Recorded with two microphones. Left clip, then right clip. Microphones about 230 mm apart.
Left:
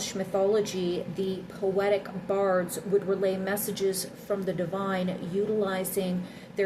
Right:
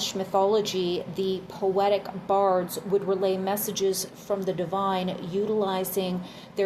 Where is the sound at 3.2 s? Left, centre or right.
Centre.